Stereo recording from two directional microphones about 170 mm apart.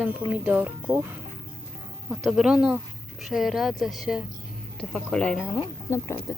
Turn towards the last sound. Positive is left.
turn(degrees=15)  # may be behind; listen again after turning